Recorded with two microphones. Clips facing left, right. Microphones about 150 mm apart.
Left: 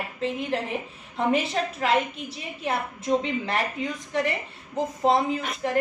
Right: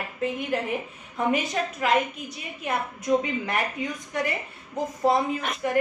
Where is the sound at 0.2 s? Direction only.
25° left (ahead or behind).